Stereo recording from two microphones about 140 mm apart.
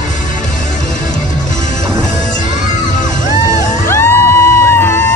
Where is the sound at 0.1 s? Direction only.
65° left (ahead or behind).